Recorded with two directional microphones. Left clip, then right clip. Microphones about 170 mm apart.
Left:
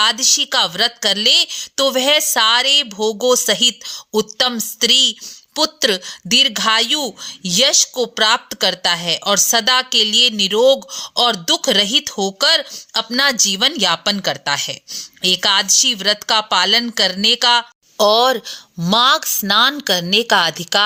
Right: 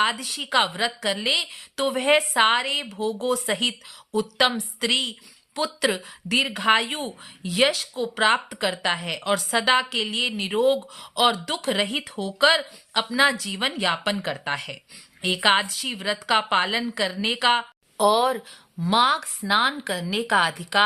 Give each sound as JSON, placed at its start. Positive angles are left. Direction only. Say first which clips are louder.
{"t": 0.0, "sound": "speech", "louder": "left 9 dB", "side_deg": 30}